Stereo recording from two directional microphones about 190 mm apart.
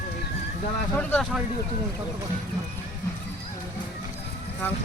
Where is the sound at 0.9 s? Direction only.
10° left (ahead or behind).